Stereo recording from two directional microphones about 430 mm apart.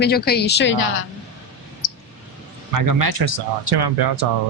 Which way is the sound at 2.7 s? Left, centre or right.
Right.